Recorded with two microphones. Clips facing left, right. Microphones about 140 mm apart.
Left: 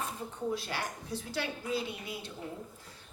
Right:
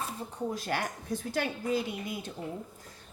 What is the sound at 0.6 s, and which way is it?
A woman's voice, 50° right (ahead or behind).